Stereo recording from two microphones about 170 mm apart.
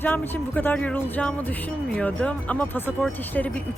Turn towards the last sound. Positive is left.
turn(degrees=10)  # may be behind; listen again after turning